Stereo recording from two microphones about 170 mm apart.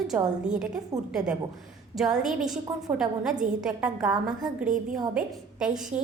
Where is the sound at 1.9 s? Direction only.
Centre (ahead or behind).